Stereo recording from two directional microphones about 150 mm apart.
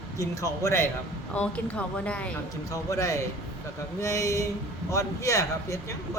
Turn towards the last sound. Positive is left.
turn(degrees=20)  # may be behind; listen again after turning